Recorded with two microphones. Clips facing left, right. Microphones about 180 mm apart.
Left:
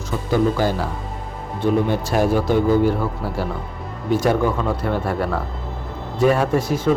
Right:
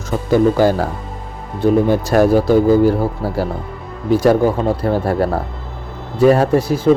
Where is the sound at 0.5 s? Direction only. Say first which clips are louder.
Right 7 dB; 45° right (ahead or behind).